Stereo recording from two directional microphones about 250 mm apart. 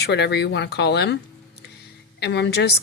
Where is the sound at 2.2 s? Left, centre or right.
Left.